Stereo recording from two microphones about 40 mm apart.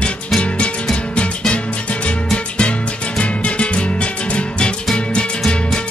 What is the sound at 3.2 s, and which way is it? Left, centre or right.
Music, left.